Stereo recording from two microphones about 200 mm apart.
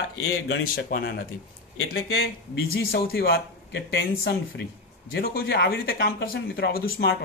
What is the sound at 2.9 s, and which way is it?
Speech, 50° left (ahead or behind).